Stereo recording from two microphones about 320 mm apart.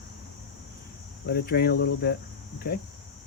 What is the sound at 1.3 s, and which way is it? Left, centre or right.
Speech, left.